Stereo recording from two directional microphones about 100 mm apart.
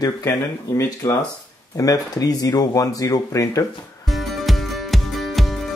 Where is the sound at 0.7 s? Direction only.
30° left (ahead or behind).